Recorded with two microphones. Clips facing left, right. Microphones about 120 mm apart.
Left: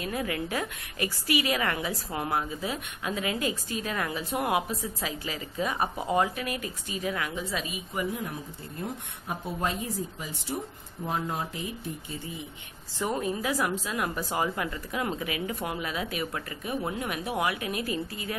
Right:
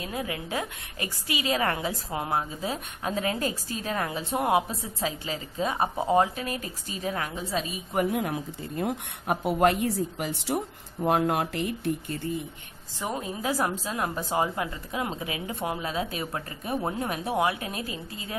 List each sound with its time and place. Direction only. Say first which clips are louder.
0.0 s a woman's voice: left 2 dB; 25° right (ahead or behind)
7.9 s speech: right 7 dB; 65° right (ahead or behind)
13.0 s a woman's voice: left 2 dB; 25° right (ahead or behind)